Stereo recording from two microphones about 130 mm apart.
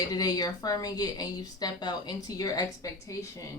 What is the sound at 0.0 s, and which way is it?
Speech, 30° left (ahead or behind).